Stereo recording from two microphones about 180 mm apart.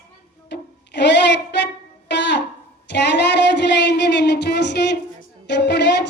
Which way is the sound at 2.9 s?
75° left (ahead or behind).